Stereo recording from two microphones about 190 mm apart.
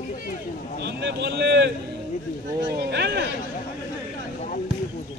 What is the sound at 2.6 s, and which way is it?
Vehicle, 60° right (ahead or behind).